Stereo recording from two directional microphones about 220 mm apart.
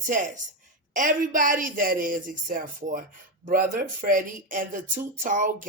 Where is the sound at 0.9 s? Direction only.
40° right (ahead or behind).